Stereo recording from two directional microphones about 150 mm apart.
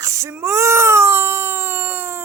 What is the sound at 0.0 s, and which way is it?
Baby cry, 20° right (ahead or behind).